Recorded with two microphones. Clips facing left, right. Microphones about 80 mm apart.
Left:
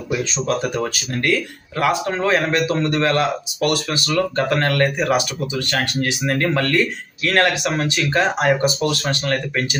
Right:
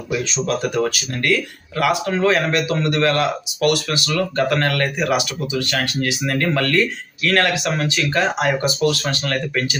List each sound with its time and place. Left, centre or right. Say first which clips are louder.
0.4 s speech: right 2 dB; left